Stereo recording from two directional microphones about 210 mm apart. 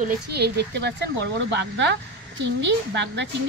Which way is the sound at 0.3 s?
50° right (ahead or behind).